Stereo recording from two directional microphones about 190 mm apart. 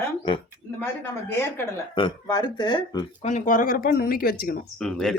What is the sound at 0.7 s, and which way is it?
Speech, 10° left (ahead or behind).